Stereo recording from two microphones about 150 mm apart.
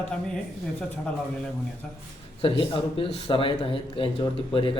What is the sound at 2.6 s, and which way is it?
Speech, 35° left (ahead or behind).